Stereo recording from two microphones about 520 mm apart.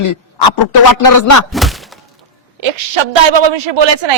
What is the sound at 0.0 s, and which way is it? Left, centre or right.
A man's voice, left.